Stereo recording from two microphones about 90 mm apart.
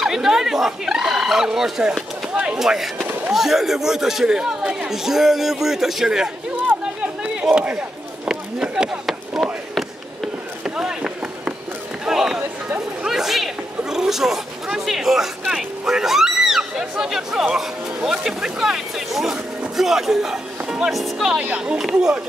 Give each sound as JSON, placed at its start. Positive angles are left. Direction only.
{"t": 0.0, "sound": "speech", "side_deg": -5}
{"t": 7.3, "sound": "speech", "side_deg": -10}
{"t": 8.3, "sound": "chop", "side_deg": -10}
{"t": 12.1, "sound": "run", "side_deg": -5}
{"t": 12.6, "sound": "chatter", "side_deg": -15}
{"t": 13.1, "sound": "a sound", "side_deg": -5}
{"t": 15.5, "sound": "speech", "side_deg": -5}